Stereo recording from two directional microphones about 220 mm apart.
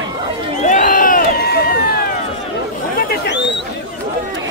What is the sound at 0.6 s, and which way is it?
Crowd, 35° left (ahead or behind).